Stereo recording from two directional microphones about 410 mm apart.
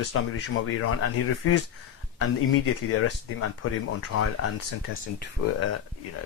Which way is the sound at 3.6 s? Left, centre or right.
Left.